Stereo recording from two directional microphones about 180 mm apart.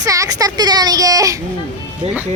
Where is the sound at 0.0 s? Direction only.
20° right (ahead or behind).